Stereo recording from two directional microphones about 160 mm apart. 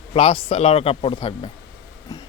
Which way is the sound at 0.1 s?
35° left (ahead or behind).